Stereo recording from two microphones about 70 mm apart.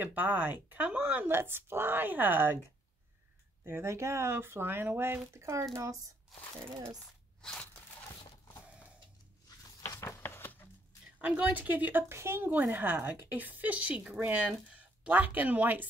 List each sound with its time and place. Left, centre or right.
0.0 s speech: right
3.6 s speech: right
6.3 s speech: centre
9.8 s a sound: left
11.1 s speech: centre
12.1 s speech: right
12.4 s speech: right